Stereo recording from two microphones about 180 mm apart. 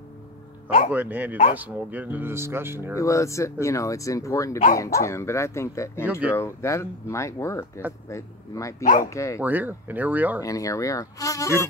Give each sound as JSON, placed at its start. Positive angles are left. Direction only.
{"t": 0.9, "sound": "speech", "side_deg": -10}
{"t": 3.0, "sound": "speech", "side_deg": 15}
{"t": 8.8, "sound": "speech", "side_deg": 50}
{"t": 9.1, "sound": "speech", "side_deg": 15}
{"t": 9.4, "sound": "speech", "side_deg": -10}
{"t": 10.4, "sound": "speech", "side_deg": 20}